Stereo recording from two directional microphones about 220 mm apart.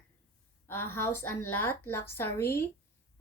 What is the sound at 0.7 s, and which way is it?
Speech, 10° left (ahead or behind).